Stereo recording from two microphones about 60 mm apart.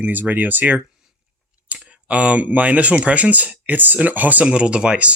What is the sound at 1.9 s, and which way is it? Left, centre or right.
Speech, right.